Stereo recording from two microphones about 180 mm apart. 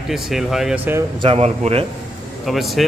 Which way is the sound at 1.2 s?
30° right (ahead or behind).